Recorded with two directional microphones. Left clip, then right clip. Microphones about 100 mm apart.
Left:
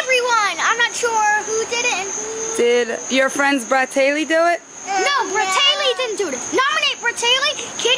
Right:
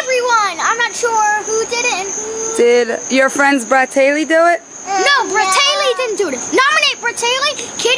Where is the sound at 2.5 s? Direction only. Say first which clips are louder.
Right 5 dB; 5° right (ahead or behind).